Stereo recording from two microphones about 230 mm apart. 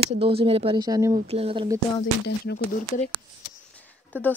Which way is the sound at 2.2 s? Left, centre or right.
Left.